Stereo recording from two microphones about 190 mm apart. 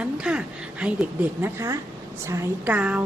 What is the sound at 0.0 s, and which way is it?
A woman's voice, 5° right (ahead or behind).